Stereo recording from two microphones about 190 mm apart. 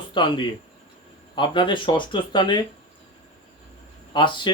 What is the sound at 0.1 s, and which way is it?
Speech, 25° left (ahead or behind).